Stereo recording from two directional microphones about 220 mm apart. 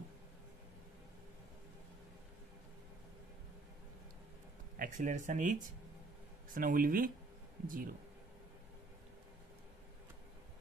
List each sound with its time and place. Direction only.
4.7 s speech: 35° right (ahead or behind)